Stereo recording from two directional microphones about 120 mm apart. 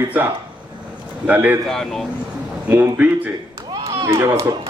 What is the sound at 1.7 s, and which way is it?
Speech, 5° left (ahead or behind).